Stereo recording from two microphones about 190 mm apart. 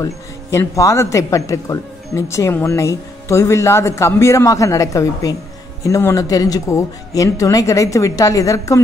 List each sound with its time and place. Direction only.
0.0 s speech: 15° left (ahead or behind)